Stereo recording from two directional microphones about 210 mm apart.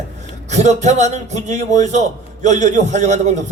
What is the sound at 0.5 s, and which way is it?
A man's voice, 35° right (ahead or behind).